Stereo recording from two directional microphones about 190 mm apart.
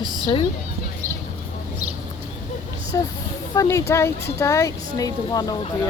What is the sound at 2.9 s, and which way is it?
Speech, 20° left (ahead or behind).